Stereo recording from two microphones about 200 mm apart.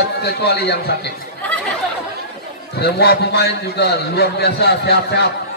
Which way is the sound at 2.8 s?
55° left (ahead or behind).